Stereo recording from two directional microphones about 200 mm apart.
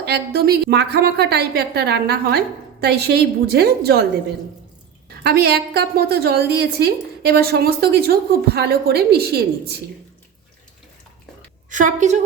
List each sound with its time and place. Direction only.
0.0 s a woman's voice: 50° right (ahead or behind)
5.0 s a woman's voice: 50° right (ahead or behind)
11.7 s a woman's voice: 40° right (ahead or behind)